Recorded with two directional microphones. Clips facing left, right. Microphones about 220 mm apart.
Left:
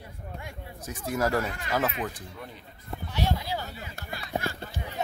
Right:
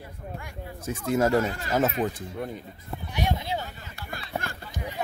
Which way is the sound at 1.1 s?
25° right (ahead or behind).